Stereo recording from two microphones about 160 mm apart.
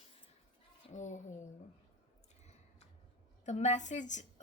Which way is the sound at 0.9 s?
50° left (ahead or behind).